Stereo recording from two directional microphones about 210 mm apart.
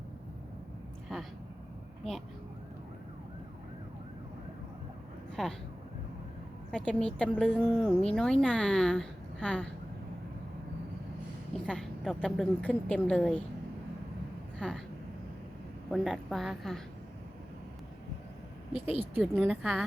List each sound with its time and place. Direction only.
1.1 s a sound: centre (ahead or behind)
5.4 s speech: centre (ahead or behind)
6.7 s speech: 5° left (ahead or behind)
11.6 s speech: 5° left (ahead or behind)
14.6 s speech: 5° left (ahead or behind)
15.9 s speech: centre (ahead or behind)
18.9 s speech: 10° right (ahead or behind)
19.4 s speech: centre (ahead or behind)